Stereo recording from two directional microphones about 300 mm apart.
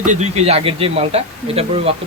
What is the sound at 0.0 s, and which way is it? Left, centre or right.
Speech, right.